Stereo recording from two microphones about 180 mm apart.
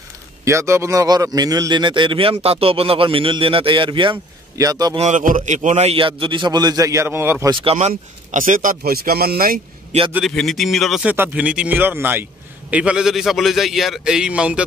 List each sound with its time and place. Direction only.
0.5 s a man's voice: 15° right (ahead or behind)
4.9 s a man's voice: 40° right (ahead or behind); by 7.5 s 15° right (ahead or behind)
7.6 s speech: 30° right (ahead or behind)
7.9 s speech: 45° right (ahead or behind)
10.1 s a man's voice: centre (ahead or behind)